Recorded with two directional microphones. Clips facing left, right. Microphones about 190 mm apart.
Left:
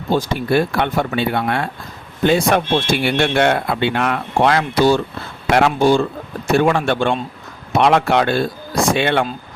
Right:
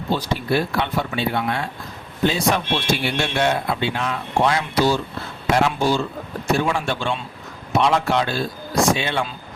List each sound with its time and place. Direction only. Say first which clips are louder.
0.1 s speech: left 5 dB; 50° left (ahead or behind)